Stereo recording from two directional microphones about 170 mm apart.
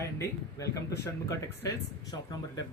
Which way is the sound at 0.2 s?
20° left (ahead or behind).